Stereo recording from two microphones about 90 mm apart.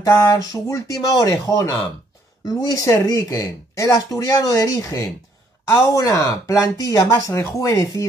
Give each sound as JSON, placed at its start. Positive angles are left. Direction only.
{"t": 0.0, "sound": "speech", "side_deg": 40}